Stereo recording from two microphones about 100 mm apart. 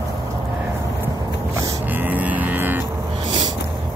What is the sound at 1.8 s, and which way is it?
Music, 20° right (ahead or behind).